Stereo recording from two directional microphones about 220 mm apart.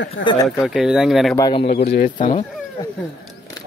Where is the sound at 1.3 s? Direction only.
15° left (ahead or behind).